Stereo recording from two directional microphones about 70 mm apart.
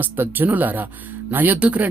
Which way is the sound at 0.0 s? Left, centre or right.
Right.